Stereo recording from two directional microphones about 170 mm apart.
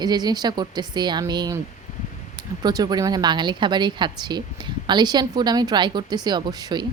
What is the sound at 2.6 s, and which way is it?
Speech, 25° right (ahead or behind).